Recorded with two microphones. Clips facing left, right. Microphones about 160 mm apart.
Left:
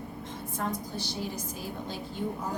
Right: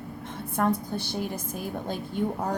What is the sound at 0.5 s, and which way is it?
A woman's voice, 55° right (ahead or behind).